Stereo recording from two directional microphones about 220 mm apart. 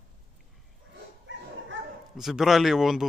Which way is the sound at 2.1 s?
Centre (ahead or behind).